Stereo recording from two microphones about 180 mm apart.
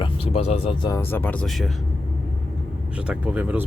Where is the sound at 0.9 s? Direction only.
15° left (ahead or behind).